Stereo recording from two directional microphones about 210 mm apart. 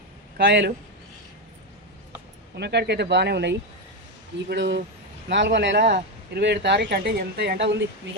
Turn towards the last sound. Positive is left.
turn(degrees=-55)  # may be behind; listen again after turning